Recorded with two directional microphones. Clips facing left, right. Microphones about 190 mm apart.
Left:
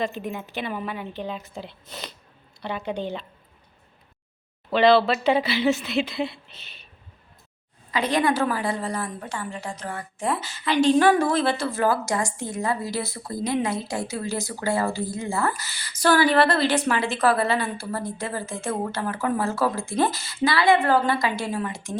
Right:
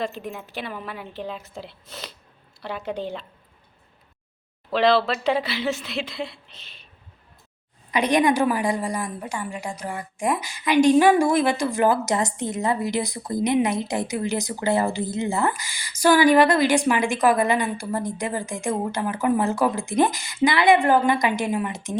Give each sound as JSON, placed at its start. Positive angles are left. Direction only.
{"t": 0.0, "sound": "a woman's voice", "side_deg": 0}
{"t": 4.7, "sound": "a woman's voice", "side_deg": 0}
{"t": 7.9, "sound": "a woman's voice", "side_deg": -15}